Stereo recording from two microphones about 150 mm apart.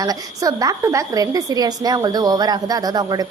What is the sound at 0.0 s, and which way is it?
A woman's voice, 25° right (ahead or behind).